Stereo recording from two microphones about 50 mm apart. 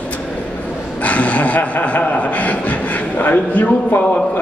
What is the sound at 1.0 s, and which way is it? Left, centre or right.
Speech, left.